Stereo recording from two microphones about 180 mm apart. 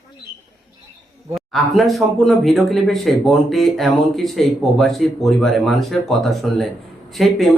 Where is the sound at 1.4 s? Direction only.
Centre (ahead or behind).